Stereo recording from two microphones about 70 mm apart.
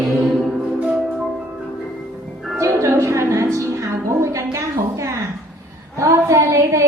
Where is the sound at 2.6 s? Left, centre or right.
Right.